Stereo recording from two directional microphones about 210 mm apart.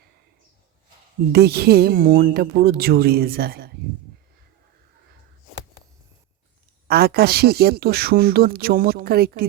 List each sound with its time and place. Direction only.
1.3 s speech: 50° right (ahead or behind)
6.8 s speech: 50° right (ahead or behind)